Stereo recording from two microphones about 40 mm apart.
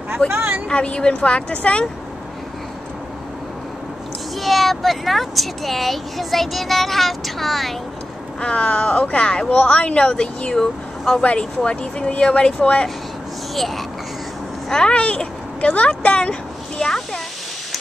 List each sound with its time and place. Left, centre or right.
0.3 s a woman's voice: right
0.7 s speech: left
4.4 s speech: centre
8.4 s speech: left
14.7 s a child's voice: centre
15.0 s speech: left
16.7 s a sound: centre